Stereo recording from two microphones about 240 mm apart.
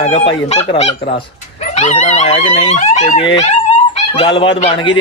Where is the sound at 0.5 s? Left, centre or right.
Left.